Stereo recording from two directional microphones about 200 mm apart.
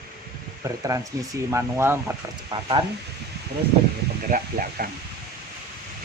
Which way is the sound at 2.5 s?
25° right (ahead or behind).